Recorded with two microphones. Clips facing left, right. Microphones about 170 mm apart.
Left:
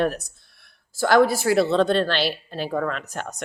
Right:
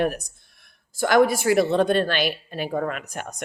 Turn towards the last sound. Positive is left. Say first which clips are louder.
# left 1 dB
turn(degrees=-15)  # may be behind; listen again after turning